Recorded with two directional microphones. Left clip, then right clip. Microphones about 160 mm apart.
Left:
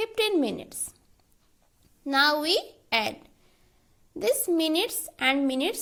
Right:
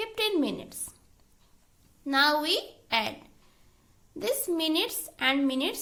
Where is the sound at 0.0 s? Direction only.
35° left (ahead or behind).